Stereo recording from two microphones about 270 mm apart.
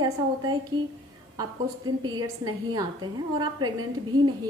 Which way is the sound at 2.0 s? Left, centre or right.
Centre.